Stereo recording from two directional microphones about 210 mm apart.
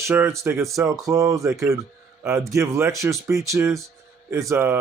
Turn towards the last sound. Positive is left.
turn(degrees=-10)  # may be behind; listen again after turning